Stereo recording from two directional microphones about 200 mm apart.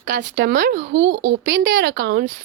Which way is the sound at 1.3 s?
65° right (ahead or behind).